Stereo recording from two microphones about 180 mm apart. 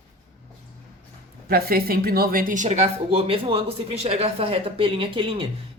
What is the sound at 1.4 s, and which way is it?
Speech, 55° right (ahead or behind).